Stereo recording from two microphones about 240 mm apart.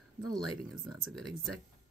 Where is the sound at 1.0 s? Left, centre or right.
Centre.